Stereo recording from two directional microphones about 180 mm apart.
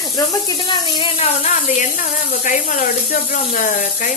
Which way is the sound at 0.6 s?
30° left (ahead or behind).